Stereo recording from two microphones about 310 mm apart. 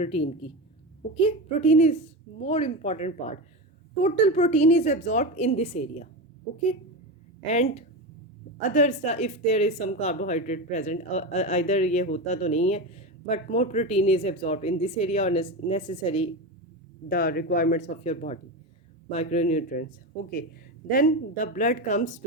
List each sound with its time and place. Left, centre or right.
0.0 s a woman's voice: left
7.4 s a woman's voice: left
17.1 s a woman's voice: left
20.9 s a woman's voice: left